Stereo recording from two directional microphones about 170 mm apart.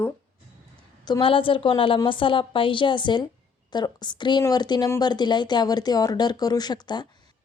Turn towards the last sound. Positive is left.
turn(degrees=25)  # may be behind; listen again after turning